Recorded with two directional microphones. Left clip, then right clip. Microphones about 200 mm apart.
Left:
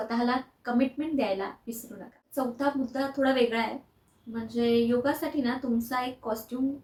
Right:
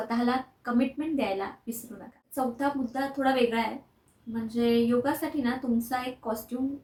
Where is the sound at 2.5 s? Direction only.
10° right (ahead or behind).